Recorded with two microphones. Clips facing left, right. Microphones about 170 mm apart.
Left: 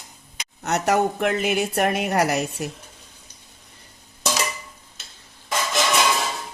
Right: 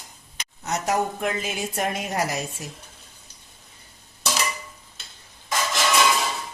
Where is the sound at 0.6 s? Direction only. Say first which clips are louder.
Left 4 dB; 65° left (ahead or behind).